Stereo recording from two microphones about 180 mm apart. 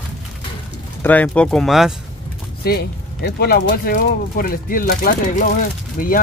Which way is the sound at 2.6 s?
60° left (ahead or behind).